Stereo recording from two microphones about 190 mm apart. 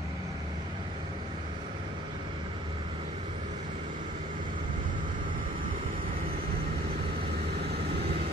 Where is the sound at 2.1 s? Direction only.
30° right (ahead or behind).